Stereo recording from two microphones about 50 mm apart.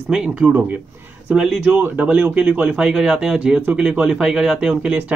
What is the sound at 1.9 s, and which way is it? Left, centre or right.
Speech, right.